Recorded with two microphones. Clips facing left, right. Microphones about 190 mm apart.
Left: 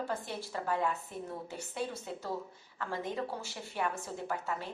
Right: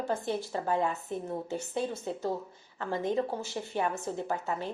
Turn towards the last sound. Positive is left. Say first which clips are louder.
# right 5 dB
turn(degrees=-25)  # may be behind; listen again after turning